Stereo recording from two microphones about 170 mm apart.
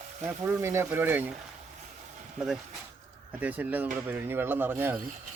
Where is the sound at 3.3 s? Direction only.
10° right (ahead or behind).